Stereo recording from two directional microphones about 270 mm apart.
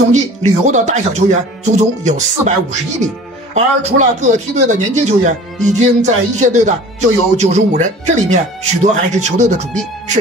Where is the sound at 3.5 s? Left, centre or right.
Right.